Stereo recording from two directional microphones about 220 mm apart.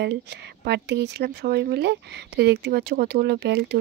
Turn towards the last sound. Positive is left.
turn(degrees=-50)  # may be behind; listen again after turning